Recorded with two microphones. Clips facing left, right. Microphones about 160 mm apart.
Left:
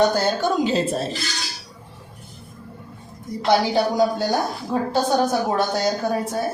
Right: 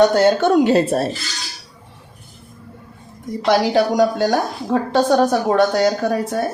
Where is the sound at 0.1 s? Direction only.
75° right (ahead or behind).